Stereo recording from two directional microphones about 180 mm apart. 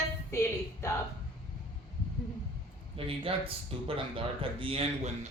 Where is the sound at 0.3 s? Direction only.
15° left (ahead or behind).